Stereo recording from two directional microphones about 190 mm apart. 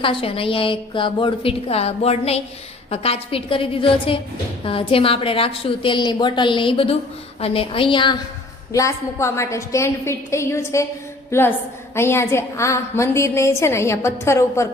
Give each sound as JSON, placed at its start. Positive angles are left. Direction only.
{"t": 0.0, "sound": "a woman's voice", "side_deg": 30}